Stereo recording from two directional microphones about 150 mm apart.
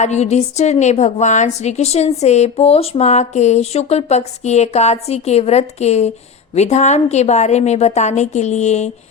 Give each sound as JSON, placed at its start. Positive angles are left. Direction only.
{"t": 0.0, "sound": "a woman's voice", "side_deg": 50}